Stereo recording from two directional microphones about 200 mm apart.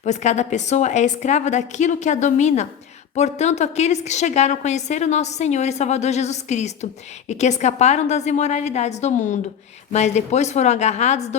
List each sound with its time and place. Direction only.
0.0 s a woman's voice: 35° left (ahead or behind)